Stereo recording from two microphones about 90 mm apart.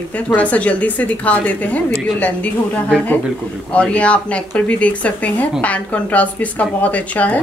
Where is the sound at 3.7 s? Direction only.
15° left (ahead or behind).